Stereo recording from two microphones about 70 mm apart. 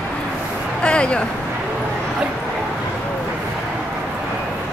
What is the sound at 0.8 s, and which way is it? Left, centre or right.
Speech, centre.